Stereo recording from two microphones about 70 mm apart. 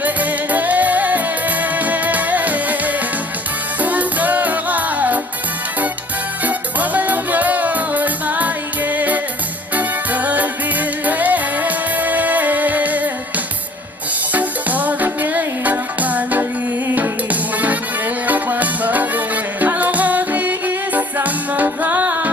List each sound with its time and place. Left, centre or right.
0.0 s music: right
6.4 s music: right
14.3 s music: right
17.6 s music: right